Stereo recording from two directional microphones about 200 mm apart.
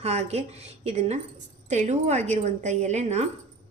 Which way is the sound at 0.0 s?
35° right (ahead or behind).